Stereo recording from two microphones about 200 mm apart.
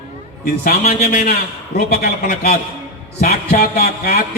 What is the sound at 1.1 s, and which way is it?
A man's voice, 45° left (ahead or behind).